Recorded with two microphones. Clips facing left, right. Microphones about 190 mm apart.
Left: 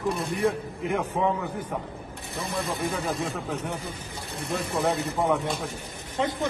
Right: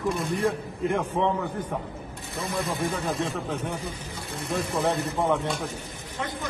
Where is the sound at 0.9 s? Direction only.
10° left (ahead or behind).